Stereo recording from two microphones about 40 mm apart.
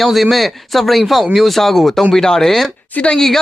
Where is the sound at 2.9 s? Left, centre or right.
Left.